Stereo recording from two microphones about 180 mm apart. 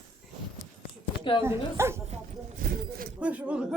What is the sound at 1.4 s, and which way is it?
Speech, 15° right (ahead or behind).